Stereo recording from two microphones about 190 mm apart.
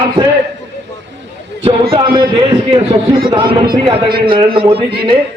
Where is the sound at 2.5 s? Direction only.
30° right (ahead or behind).